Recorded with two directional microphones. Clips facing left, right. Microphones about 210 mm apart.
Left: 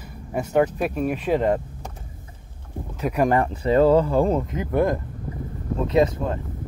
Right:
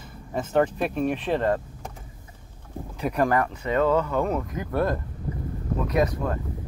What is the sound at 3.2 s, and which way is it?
Speech, 25° left (ahead or behind).